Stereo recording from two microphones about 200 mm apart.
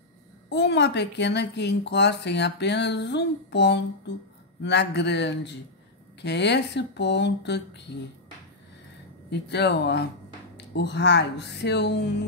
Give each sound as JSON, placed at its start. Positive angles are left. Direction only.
{"t": 0.5, "sound": "speech", "side_deg": 60}
{"t": 9.3, "sound": "speech", "side_deg": 60}